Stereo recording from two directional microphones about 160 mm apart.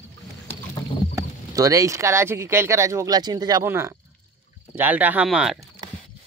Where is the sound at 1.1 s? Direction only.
20° right (ahead or behind); by 5.6 s 5° right (ahead or behind).